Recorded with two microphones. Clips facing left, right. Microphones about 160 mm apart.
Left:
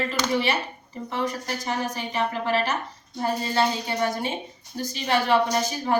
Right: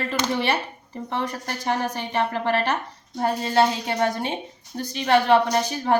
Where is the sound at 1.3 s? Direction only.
55° right (ahead or behind).